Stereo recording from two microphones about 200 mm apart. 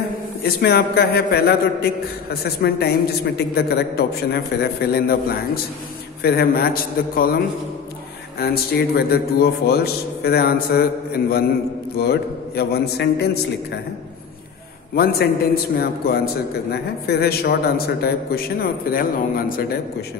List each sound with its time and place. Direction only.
0.4 s a man's voice: 55° left (ahead or behind)
15.7 s a man's voice: 50° left (ahead or behind)